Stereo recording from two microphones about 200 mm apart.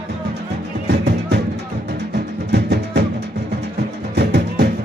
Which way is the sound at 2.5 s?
55° right (ahead or behind).